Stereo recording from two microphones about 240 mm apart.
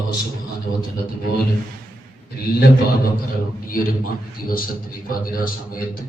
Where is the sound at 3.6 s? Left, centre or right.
Left.